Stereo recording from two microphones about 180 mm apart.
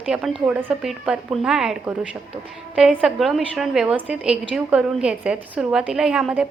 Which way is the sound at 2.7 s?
5° right (ahead or behind).